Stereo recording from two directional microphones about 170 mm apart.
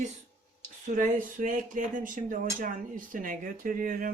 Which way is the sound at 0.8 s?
50° right (ahead or behind).